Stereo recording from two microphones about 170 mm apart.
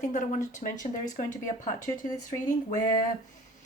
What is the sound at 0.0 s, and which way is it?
Speech, 45° left (ahead or behind).